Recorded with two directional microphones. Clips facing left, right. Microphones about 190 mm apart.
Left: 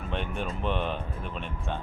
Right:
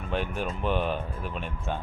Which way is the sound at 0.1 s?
Centre (ahead or behind).